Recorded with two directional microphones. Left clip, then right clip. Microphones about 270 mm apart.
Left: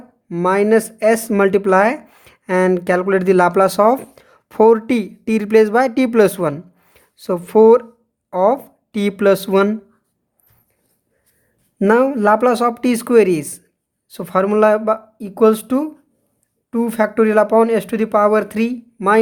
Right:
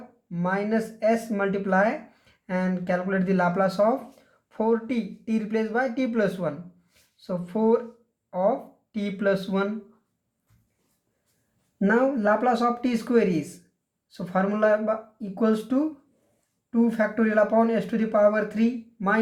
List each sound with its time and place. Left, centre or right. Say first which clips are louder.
0.3 s speech: left 13 dB; left
11.8 s speech: left 9 dB; left